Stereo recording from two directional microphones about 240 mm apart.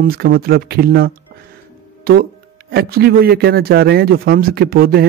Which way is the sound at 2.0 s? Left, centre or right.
Right.